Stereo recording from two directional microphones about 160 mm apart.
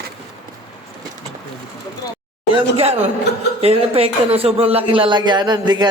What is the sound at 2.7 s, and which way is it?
Speech, 40° right (ahead or behind).